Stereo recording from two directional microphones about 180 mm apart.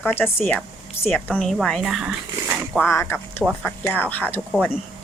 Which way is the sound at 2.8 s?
10° left (ahead or behind).